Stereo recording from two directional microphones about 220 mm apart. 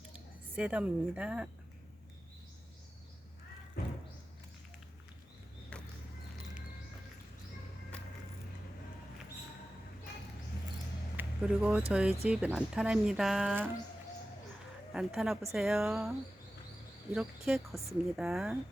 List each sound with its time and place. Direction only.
0.5 s speech: 5° right (ahead or behind)
3.8 s music: 40° left (ahead or behind)
5.7 s a sound: 5° left (ahead or behind)
11.2 s a sound: 5° right (ahead or behind)
11.9 s speech: 5° right (ahead or behind)
14.9 s speech: centre (ahead or behind)
17.2 s speech: 5° right (ahead or behind)